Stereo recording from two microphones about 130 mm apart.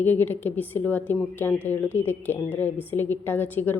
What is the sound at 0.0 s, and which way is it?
A woman's voice, 15° left (ahead or behind).